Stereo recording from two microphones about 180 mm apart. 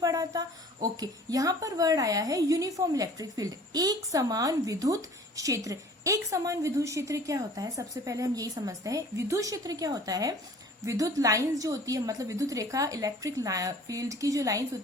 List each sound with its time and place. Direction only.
0.0 s a woman's voice: 20° right (ahead or behind)